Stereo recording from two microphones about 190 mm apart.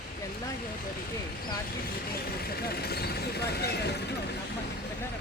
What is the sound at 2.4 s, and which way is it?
Speech, 55° left (ahead or behind).